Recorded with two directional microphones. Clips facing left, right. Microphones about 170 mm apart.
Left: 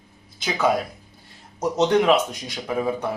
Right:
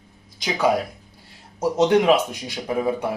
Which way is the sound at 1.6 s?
10° right (ahead or behind).